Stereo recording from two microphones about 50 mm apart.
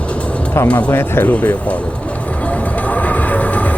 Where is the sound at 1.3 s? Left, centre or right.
Left.